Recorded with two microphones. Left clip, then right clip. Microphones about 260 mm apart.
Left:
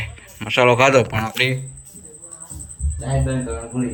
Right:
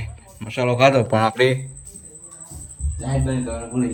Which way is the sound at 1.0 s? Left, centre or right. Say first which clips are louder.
Right 4 dB; right.